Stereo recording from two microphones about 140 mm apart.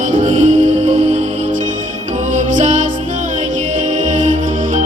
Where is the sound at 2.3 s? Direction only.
65° right (ahead or behind).